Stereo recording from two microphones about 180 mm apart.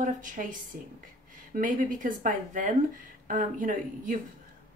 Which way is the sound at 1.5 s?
50° right (ahead or behind).